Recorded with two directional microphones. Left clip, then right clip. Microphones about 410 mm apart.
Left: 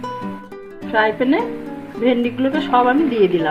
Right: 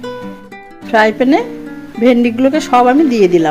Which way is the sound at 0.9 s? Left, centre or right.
Right.